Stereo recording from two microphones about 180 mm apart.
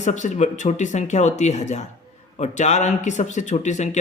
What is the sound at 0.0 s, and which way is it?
Speech, 40° left (ahead or behind).